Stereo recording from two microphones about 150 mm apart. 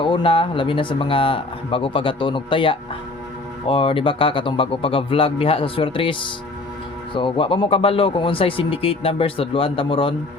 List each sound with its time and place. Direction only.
0.0 s speech: 35° left (ahead or behind)